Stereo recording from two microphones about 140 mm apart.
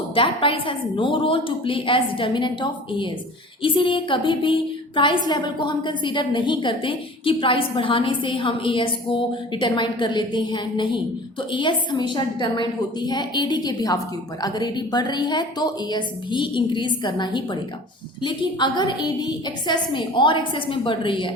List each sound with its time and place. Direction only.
0.1 s a woman's voice: 40° left (ahead or behind)